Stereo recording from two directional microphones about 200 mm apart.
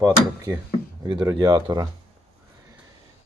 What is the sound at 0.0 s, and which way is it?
Speech, 15° right (ahead or behind).